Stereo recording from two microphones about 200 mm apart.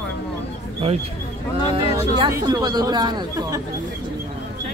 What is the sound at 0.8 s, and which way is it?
Speech, 30° right (ahead or behind).